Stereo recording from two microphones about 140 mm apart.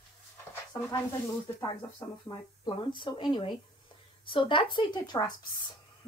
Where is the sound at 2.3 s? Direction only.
35° left (ahead or behind).